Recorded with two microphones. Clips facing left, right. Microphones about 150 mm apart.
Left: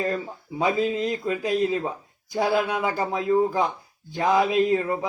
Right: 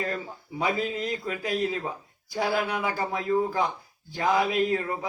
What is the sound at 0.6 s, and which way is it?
A man's voice, 20° left (ahead or behind).